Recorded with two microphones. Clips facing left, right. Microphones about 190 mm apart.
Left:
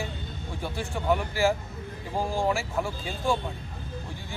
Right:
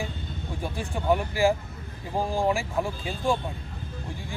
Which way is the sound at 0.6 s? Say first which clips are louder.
Even; 15° right (ahead or behind).